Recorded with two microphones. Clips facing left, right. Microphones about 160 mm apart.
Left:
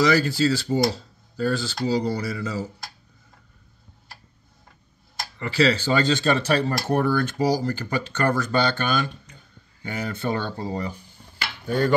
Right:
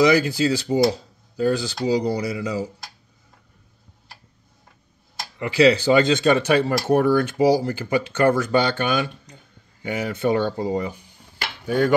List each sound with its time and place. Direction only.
0.0 s speech: 15° right (ahead or behind)
5.4 s speech: 15° right (ahead or behind)
11.6 s cutlery: 10° right (ahead or behind)